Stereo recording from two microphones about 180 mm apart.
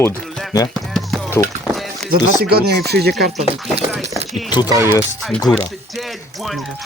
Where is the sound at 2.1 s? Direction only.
60° right (ahead or behind).